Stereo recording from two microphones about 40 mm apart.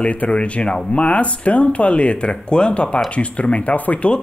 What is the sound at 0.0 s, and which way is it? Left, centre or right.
Speech, left.